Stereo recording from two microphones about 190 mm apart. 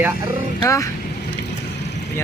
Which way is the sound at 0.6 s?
15° left (ahead or behind).